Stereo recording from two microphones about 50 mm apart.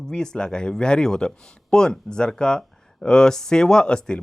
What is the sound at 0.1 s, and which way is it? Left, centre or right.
Speech, centre.